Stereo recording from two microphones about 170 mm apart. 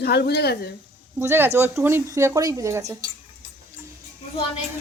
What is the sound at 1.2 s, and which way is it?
Speech, 15° right (ahead or behind).